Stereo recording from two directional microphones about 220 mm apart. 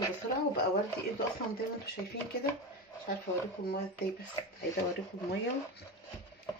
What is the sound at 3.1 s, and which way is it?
Speech, 45° left (ahead or behind).